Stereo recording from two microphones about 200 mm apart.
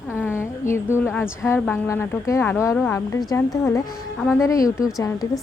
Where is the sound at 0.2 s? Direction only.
10° left (ahead or behind).